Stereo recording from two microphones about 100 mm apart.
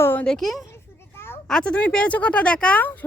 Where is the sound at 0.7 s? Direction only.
25° left (ahead or behind).